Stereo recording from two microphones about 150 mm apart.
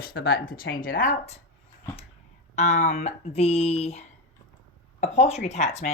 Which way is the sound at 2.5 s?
50° left (ahead or behind).